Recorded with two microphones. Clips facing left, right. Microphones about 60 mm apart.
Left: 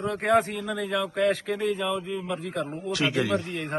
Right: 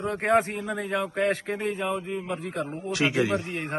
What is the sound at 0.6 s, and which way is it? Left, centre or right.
Speech, right.